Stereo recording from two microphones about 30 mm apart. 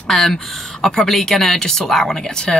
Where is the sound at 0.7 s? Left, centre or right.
Centre.